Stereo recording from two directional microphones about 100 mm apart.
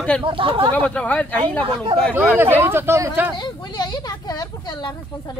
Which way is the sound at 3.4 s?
45° left (ahead or behind).